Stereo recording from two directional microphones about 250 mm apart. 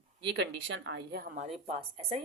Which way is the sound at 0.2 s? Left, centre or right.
Right.